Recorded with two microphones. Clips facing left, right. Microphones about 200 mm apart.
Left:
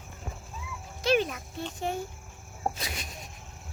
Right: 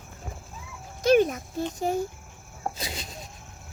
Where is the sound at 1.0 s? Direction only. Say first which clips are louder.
Right 6 dB; 45° right (ahead or behind).